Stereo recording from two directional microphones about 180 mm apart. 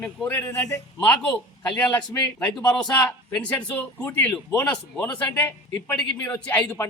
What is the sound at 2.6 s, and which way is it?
Speech, 20° left (ahead or behind).